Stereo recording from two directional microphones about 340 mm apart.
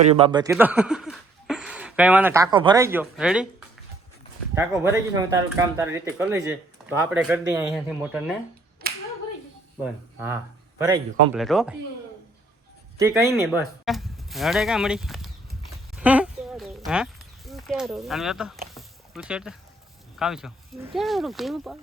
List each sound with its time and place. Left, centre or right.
0.1 s speech: centre
4.5 s speech: centre
8.8 s clapping: right
10.2 s speech: centre
13.0 s speech: centre
16.0 s a sound: centre
20.1 s speech: centre